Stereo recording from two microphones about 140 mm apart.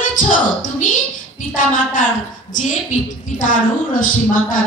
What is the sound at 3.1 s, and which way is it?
Speech, 70° left (ahead or behind).